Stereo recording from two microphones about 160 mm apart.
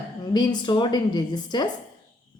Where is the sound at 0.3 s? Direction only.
25° left (ahead or behind).